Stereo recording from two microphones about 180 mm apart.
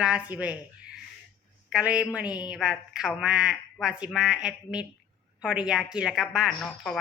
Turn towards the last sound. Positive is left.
turn(degrees=0)  # may be behind; listen again after turning